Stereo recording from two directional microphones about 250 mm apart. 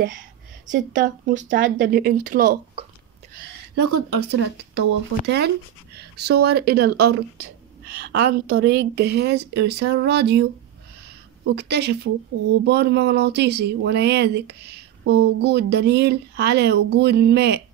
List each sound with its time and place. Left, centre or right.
0.7 s a woman's voice: right
3.7 s speech: right
5.9 s a woman's voice: right
11.4 s a woman's voice: right